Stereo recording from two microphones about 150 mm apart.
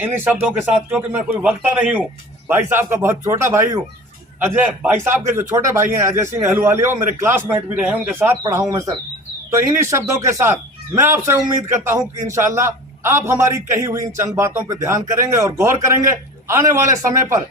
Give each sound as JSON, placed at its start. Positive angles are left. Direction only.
{"t": 0.0, "sound": "a man's voice", "side_deg": -15}